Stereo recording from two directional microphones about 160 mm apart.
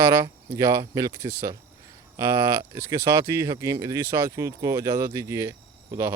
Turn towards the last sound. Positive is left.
turn(degrees=-20)  # may be behind; listen again after turning